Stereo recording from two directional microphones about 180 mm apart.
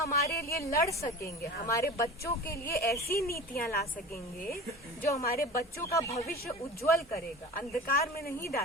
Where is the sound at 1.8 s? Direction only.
60° left (ahead or behind).